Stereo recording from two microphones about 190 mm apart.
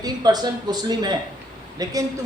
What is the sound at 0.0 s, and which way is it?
A man's voice, 20° right (ahead or behind).